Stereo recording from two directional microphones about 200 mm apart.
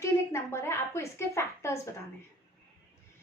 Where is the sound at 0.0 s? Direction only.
15° left (ahead or behind).